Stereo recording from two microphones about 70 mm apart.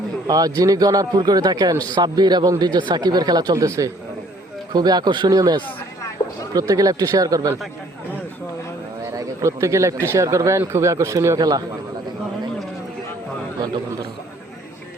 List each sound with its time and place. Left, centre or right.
0.3 s a man's voice: right
2.0 s speech: right
4.7 s speech: right
6.5 s a man's voice: right
9.1 s speech: right
11.3 s speech: right